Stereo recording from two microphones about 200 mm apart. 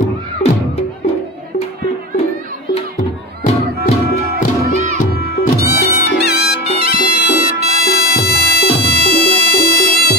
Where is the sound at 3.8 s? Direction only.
45° left (ahead or behind).